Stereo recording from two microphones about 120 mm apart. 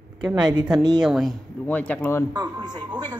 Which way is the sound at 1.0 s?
Centre (ahead or behind).